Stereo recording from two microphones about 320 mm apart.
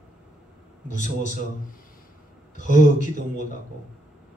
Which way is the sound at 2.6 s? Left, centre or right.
Left.